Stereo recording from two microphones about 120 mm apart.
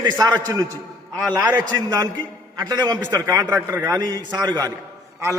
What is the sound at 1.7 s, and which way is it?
A man's voice, 35° right (ahead or behind).